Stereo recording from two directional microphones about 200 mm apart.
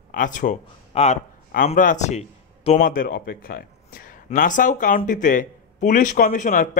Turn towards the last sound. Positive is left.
turn(degrees=40)  # may be behind; listen again after turning